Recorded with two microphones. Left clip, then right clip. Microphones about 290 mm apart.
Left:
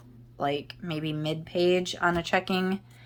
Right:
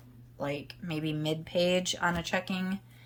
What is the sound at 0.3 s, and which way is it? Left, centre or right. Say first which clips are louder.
Speech: left 6 dB; centre.